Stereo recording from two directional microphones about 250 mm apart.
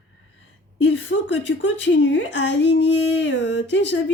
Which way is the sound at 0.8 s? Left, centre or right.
Left.